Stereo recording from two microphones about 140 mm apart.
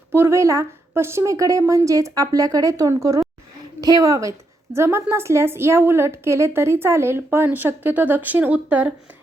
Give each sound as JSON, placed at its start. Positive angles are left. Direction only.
{"t": 0.1, "sound": "a woman's voice", "side_deg": -15}